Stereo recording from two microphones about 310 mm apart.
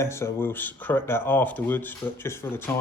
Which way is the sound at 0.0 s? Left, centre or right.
Centre.